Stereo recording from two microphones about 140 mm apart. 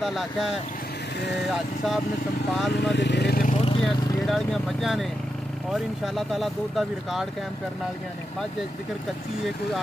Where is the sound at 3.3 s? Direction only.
70° left (ahead or behind).